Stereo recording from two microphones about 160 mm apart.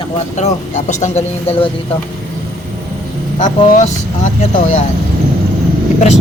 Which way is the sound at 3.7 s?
50° left (ahead or behind).